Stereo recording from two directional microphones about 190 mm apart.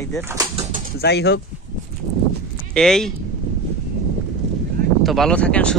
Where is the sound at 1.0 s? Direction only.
60° left (ahead or behind).